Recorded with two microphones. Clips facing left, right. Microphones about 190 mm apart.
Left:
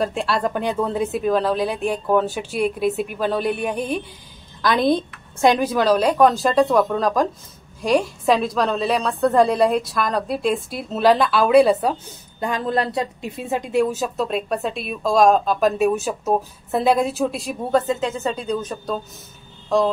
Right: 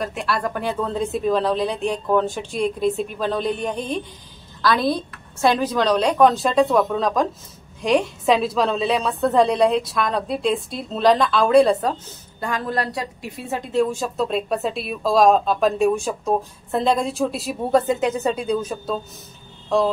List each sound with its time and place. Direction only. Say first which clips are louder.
0.0 s speech: left 3 dB; 30° left (ahead or behind); by 4.0 s 10° left (ahead or behind)
4.6 s speech: left 2 dB; 20° left (ahead or behind)
12.4 s speech: left 3 dB; 20° left (ahead or behind); by 19.9 s centre (ahead or behind)